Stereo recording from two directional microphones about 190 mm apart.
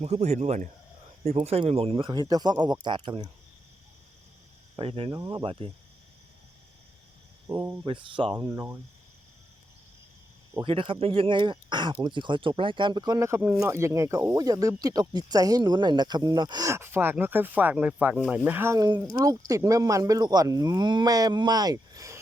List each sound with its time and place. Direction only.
0.0 s speech: 35° right (ahead or behind)
4.8 s speech: 30° right (ahead or behind)
7.5 s speech: 30° right (ahead or behind); by 8.8 s 15° right (ahead or behind)
10.6 s speech: 25° right (ahead or behind)